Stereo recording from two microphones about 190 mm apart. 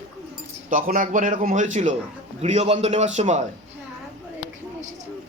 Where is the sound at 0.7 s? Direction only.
45° right (ahead or behind).